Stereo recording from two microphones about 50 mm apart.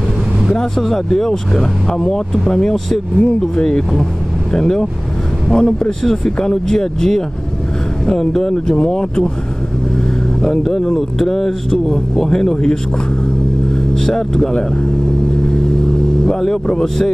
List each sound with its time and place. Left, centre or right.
0.5 s speech: centre
10.6 s speech: centre
14.0 s speech: centre
16.3 s speech: centre